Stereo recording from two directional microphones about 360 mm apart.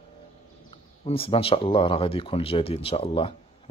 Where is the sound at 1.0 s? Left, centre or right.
Centre.